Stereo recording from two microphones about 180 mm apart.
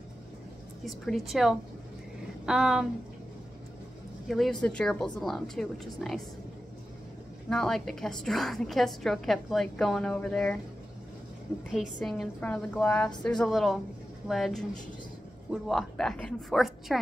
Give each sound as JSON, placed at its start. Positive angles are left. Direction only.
{"t": 0.8, "sound": "a woman's voice", "side_deg": 0}
{"t": 4.3, "sound": "a woman's voice", "side_deg": 0}
{"t": 7.4, "sound": "a woman's voice", "side_deg": 5}
{"t": 12.0, "sound": "a woman's voice", "side_deg": 5}